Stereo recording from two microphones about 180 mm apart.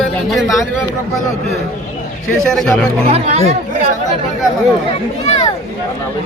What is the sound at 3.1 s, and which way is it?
Speech, 35° right (ahead or behind).